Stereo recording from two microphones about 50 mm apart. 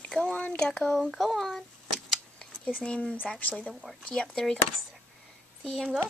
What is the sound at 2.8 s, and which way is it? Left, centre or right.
Speech, left.